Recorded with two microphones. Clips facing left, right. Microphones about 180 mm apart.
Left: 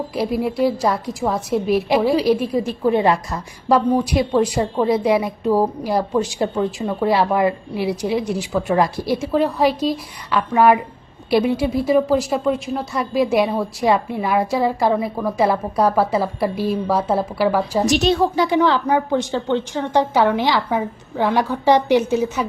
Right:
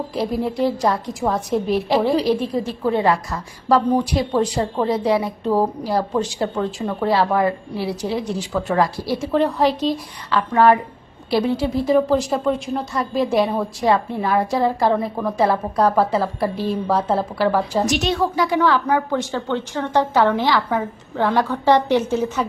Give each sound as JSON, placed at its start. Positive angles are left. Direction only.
{"t": 0.1, "sound": "a woman's voice", "side_deg": 10}
{"t": 17.8, "sound": "a woman's voice", "side_deg": 30}